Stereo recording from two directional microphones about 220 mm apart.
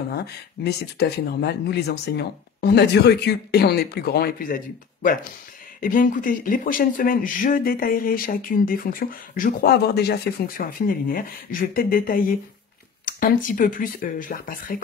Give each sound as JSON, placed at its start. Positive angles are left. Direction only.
{"t": 0.1, "sound": "speech", "side_deg": 45}